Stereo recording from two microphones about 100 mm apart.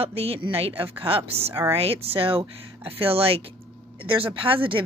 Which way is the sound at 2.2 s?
65° right (ahead or behind).